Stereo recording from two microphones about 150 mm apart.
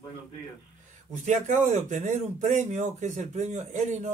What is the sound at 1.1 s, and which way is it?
A man's voice, 55° right (ahead or behind).